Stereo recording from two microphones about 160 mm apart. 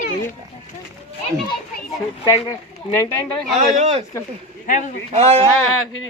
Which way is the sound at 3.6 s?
45° right (ahead or behind).